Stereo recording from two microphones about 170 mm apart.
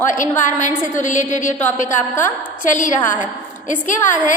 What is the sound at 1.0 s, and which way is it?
Speech, 45° left (ahead or behind).